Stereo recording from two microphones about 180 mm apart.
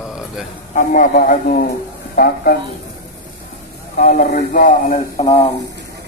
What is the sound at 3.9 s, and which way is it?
Speech, 45° left (ahead or behind).